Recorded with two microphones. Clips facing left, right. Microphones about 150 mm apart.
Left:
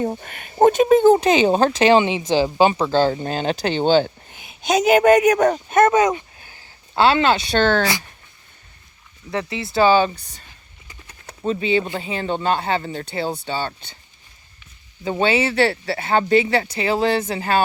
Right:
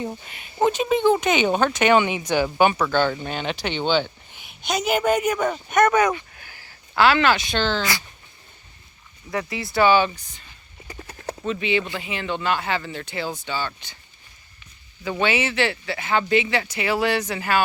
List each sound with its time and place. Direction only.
0.0 s speech: 50° left (ahead or behind)
5.4 s speech: 40° left (ahead or behind)
5.7 s speech: 25° left (ahead or behind)
6.3 s a sound: 25° left (ahead or behind)
7.5 s speech: 50° left (ahead or behind)
9.3 s speech: 25° left (ahead or behind)
10.8 s clip-clop: 35° right (ahead or behind)
11.4 s speech: 35° left (ahead or behind)
15.0 s speech: 30° left (ahead or behind)